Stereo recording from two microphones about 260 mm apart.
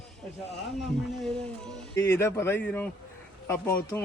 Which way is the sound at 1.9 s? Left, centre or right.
Centre.